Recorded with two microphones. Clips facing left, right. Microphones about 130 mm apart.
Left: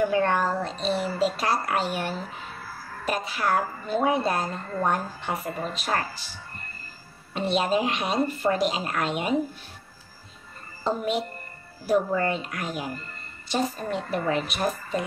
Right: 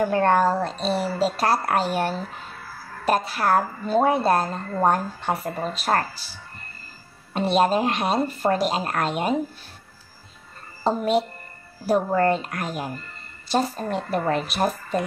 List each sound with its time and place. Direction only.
0.0 s a woman's voice: 45° right (ahead or behind)
7.3 s speech: 40° right (ahead or behind)
10.8 s speech: 40° right (ahead or behind)